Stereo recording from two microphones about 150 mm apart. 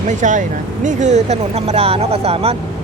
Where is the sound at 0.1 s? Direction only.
55° right (ahead or behind).